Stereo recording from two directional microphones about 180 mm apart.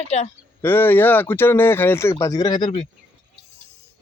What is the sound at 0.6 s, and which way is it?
Speech, 10° left (ahead or behind).